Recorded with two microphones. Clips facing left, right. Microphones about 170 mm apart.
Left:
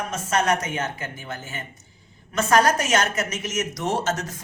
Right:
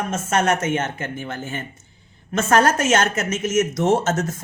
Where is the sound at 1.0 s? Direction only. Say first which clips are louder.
Right 5 dB; 50° right (ahead or behind).